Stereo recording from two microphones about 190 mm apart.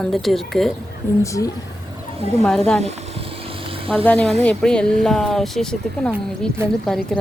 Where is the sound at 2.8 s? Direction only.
30° right (ahead or behind).